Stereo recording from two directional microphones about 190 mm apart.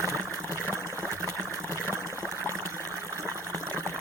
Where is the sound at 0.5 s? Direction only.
15° right (ahead or behind).